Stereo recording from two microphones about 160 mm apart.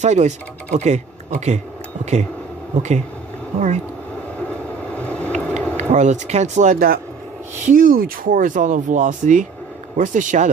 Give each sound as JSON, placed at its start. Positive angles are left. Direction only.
{"t": 0.0, "sound": "speech", "side_deg": -45}
{"t": 3.5, "sound": "speech", "side_deg": -50}
{"t": 4.4, "sound": "vehicle", "side_deg": 10}
{"t": 5.4, "sound": "a sound", "side_deg": 5}
{"t": 5.8, "sound": "speech", "side_deg": -50}